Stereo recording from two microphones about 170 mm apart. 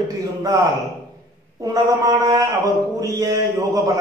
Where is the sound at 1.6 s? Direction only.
20° right (ahead or behind).